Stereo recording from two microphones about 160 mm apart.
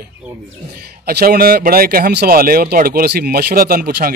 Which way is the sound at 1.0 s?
70° right (ahead or behind).